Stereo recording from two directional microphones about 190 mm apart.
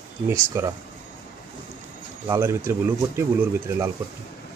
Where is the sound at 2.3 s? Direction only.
15° right (ahead or behind).